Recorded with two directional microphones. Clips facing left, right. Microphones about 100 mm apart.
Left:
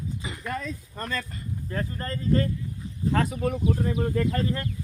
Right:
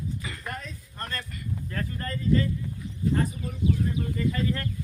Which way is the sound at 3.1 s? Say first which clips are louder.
Left 6 dB; 85° left.